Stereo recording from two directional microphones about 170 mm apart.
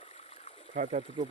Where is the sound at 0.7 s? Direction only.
45° right (ahead or behind).